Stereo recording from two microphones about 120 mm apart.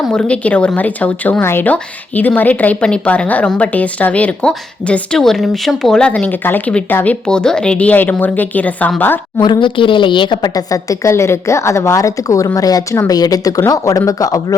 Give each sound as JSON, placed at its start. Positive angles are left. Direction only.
{"t": 0.0, "sound": "a woman's voice", "side_deg": 5}
{"t": 9.4, "sound": "a woman's voice", "side_deg": 40}